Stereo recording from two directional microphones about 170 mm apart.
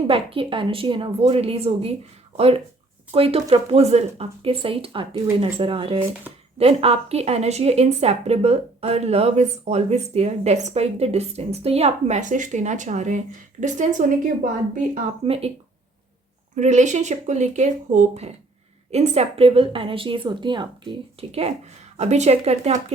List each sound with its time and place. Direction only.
0.1 s a woman's voice: 30° right (ahead or behind); by 14.1 s 45° right (ahead or behind)
15.2 s a woman's voice: 35° right (ahead or behind)
16.6 s a woman's voice: 45° right (ahead or behind)